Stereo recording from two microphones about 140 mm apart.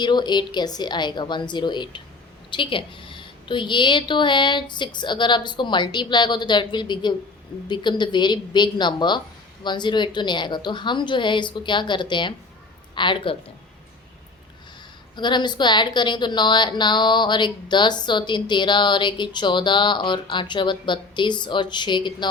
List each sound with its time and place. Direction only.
0.0 s a woman's voice: 30° left (ahead or behind)
15.1 s a woman's voice: 35° left (ahead or behind)